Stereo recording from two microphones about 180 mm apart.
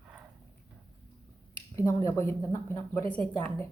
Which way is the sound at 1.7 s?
15° left (ahead or behind).